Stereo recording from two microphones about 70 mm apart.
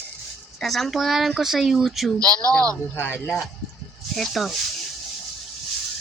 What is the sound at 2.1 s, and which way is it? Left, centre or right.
Speech, right.